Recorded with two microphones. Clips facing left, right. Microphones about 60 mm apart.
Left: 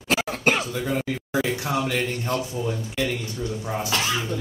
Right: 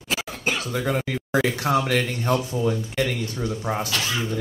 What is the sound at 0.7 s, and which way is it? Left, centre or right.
Speech, right.